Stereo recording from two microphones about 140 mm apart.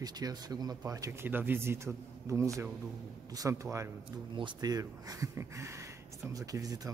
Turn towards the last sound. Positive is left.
turn(degrees=-25)  # may be behind; listen again after turning